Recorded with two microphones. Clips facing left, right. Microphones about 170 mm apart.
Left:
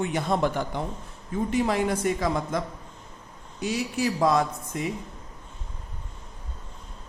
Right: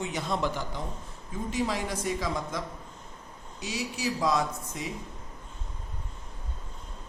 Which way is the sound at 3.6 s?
55° left (ahead or behind).